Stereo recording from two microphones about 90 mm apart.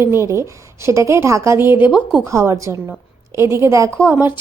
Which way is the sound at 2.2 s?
35° right (ahead or behind).